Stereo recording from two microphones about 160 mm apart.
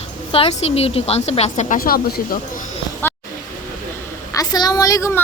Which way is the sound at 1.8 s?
70° left (ahead or behind).